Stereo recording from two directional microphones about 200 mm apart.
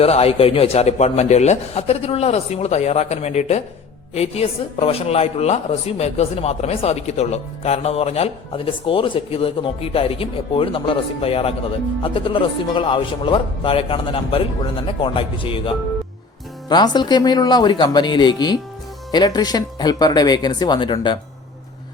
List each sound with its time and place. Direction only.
0.0 s speech: 30° left (ahead or behind)